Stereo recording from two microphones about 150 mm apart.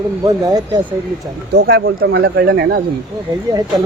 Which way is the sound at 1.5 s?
90° right.